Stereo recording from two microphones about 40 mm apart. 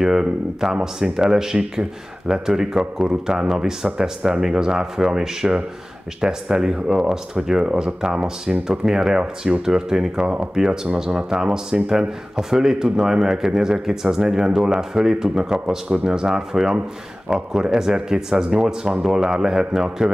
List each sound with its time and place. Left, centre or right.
0.0 s speech: centre